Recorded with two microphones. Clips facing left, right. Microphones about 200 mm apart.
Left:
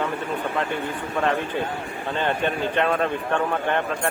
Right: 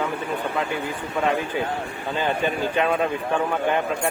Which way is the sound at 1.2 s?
5° right (ahead or behind).